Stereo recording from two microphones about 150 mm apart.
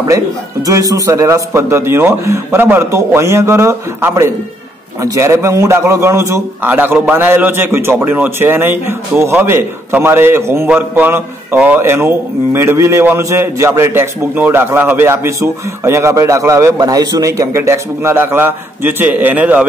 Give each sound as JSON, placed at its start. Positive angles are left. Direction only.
{"t": 0.1, "sound": "a man's voice", "side_deg": -20}